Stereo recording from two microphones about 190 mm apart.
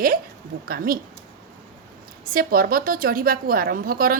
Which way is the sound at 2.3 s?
50° right (ahead or behind).